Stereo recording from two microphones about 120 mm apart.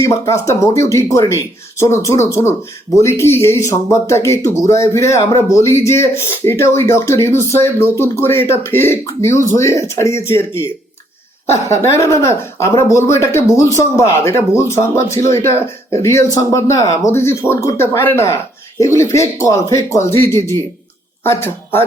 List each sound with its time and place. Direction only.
0.0 s speech: 25° left (ahead or behind)